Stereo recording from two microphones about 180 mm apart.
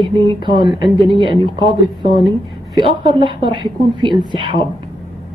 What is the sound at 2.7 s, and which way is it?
A woman's voice, 30° right (ahead or behind).